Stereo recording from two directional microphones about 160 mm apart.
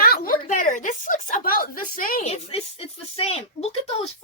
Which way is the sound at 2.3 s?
40° left (ahead or behind).